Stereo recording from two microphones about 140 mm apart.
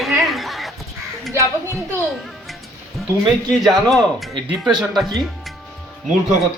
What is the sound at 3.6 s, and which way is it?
Speech, centre (ahead or behind).